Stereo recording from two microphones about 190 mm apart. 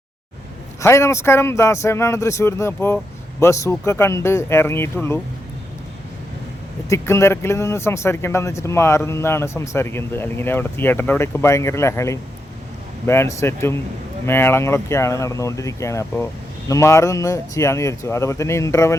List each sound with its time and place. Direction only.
0.8 s speech: 15° left (ahead or behind)
6.8 s speech: 15° left (ahead or behind)